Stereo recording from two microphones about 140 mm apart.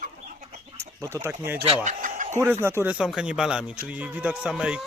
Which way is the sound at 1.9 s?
65° right (ahead or behind).